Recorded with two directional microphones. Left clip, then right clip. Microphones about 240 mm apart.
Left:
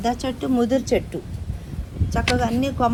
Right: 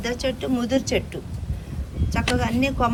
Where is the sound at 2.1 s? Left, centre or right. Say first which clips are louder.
Left 2 dB; centre.